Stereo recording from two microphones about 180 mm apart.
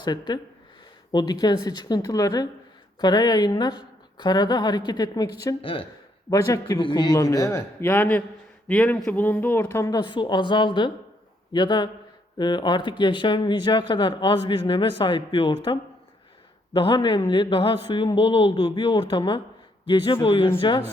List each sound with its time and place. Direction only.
0.0 s a woman's voice: 25° left (ahead or behind)